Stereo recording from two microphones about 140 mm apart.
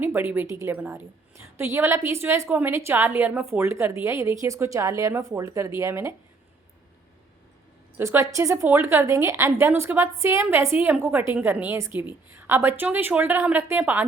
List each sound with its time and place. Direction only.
0.0 s a woman's voice: 15° right (ahead or behind)
7.9 s a woman's voice: 20° right (ahead or behind)